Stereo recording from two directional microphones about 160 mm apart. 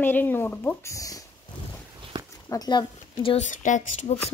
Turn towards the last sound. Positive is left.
turn(degrees=50)  # may be behind; listen again after turning